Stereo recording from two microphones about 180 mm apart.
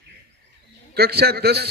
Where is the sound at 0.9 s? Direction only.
60° right (ahead or behind).